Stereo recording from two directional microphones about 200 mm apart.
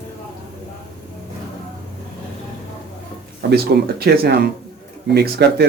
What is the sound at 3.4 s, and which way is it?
Speech, 50° right (ahead or behind).